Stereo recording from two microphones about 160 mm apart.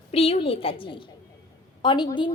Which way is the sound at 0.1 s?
40° left (ahead or behind).